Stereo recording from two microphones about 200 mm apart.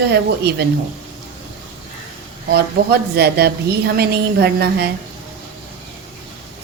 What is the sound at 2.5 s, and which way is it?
Speech, 55° right (ahead or behind).